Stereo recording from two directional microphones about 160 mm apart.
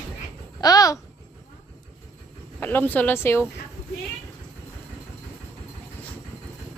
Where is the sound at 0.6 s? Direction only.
25° left (ahead or behind).